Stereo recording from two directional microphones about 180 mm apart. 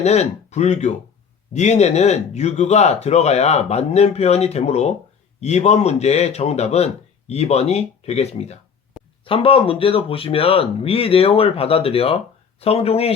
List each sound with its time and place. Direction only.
0.0 s speech: 40° left (ahead or behind)